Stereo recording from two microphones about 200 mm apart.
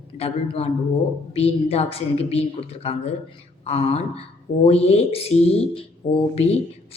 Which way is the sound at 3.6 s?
30° left (ahead or behind).